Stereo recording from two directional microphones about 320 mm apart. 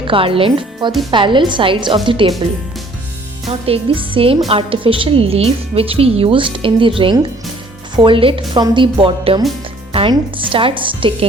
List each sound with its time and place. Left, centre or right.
0.1 s a woman's voice: centre
3.7 s a woman's voice: centre